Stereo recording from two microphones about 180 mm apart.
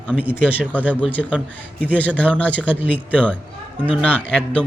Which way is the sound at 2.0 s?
10° left (ahead or behind).